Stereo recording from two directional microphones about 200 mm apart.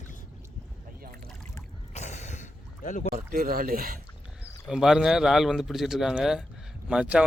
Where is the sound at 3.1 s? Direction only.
45° right (ahead or behind).